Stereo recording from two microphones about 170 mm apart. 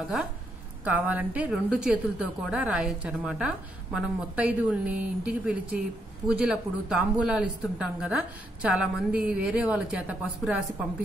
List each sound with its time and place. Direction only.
0.8 s a woman's voice: 10° right (ahead or behind)